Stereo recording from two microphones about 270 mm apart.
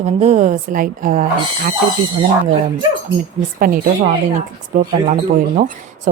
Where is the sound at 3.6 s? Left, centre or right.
Right.